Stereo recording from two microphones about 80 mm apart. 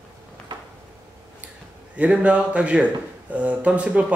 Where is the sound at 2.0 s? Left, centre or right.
Centre.